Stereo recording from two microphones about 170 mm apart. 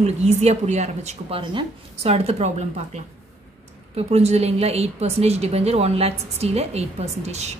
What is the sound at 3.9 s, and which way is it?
A woman's voice, 40° right (ahead or behind).